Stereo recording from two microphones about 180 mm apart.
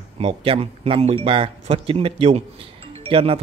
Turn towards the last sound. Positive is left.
turn(degrees=-30)  # may be behind; listen again after turning